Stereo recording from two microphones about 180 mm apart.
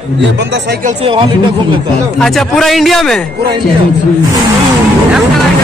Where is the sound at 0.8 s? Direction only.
30° right (ahead or behind).